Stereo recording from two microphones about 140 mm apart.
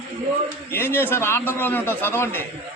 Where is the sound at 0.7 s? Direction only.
15° left (ahead or behind).